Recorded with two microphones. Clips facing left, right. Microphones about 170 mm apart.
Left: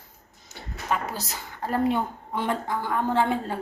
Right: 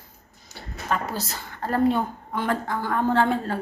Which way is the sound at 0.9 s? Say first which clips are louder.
Right 1 dB; 15° left (ahead or behind).